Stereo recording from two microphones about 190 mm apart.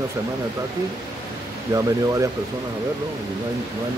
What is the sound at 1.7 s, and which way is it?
Speech, 15° right (ahead or behind).